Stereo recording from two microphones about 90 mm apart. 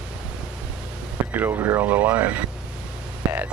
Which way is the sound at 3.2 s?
20° right (ahead or behind).